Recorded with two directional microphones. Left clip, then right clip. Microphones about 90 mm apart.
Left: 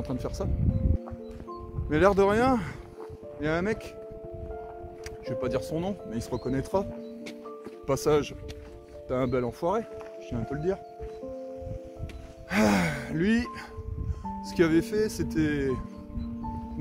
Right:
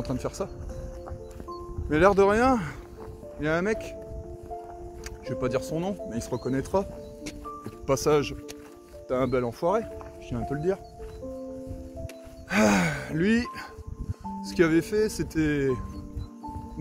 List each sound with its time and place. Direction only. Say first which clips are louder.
0.0 s speech: right 2 dB; 35° left (ahead or behind)
1.9 s speech: right 2 dB; 40° left (ahead or behind)
5.2 s speech: right 1 dB; 30° left (ahead or behind)
6.0 s speech: right 1 dB; 25° left (ahead or behind)
12.4 s speech: right 2 dB; 25° left (ahead or behind)